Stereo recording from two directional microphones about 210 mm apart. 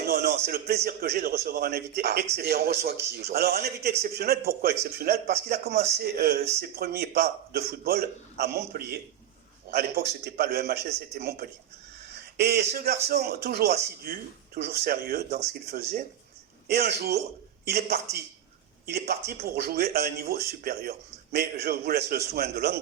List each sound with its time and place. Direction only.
0.0 s a man's voice: 50° right (ahead or behind)